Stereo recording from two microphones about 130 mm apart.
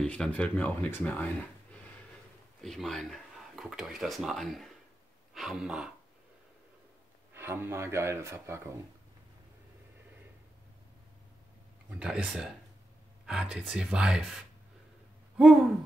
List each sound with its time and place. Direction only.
0.0 s speech: 10° left (ahead or behind)
7.3 s speech: 15° right (ahead or behind)
12.0 s speech: 10° right (ahead or behind)